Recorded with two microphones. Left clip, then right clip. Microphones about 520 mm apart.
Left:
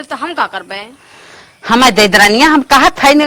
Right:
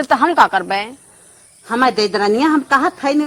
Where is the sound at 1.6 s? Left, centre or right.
Left.